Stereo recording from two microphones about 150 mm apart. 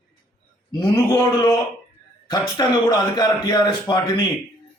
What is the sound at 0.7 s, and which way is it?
A man's voice, 25° left (ahead or behind).